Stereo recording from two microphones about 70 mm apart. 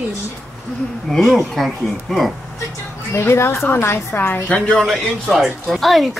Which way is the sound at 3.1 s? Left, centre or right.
Left.